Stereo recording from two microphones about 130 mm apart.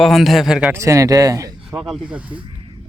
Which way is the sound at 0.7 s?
25° right (ahead or behind).